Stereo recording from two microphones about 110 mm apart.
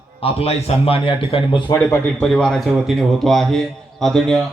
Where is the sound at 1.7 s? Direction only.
15° left (ahead or behind).